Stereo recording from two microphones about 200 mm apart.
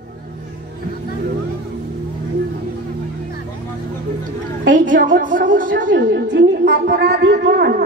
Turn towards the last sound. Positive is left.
turn(degrees=-55)  # may be behind; listen again after turning